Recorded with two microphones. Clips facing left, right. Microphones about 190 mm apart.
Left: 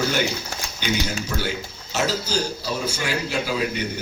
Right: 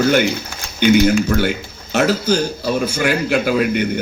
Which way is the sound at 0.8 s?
55° right (ahead or behind).